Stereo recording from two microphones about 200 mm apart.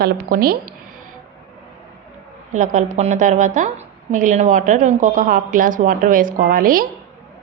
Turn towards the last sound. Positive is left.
turn(degrees=-45)  # may be behind; listen again after turning